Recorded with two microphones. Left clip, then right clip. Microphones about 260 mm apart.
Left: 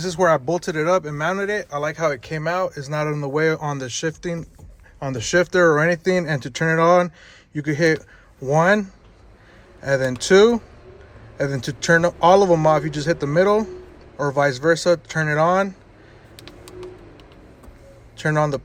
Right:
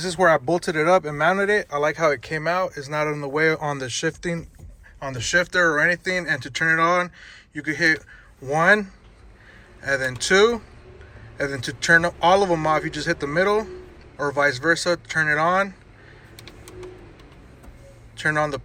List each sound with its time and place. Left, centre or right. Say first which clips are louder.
0.0 s speech: even; centre
4.9 s speech: left 2 dB; left
18.2 s speech: left 1 dB; left